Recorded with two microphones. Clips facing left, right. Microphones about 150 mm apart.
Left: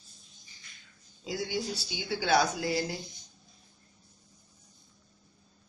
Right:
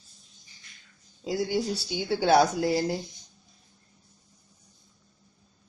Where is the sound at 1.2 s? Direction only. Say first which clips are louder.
Right 6 dB; 35° right (ahead or behind).